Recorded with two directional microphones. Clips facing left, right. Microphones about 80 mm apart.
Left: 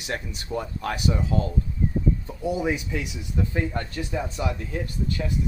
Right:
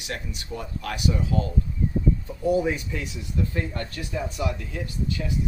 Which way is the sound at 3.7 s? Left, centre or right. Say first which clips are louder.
Left 2 dB; left.